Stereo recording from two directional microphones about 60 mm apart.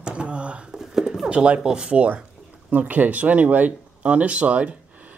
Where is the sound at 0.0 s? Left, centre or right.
Centre.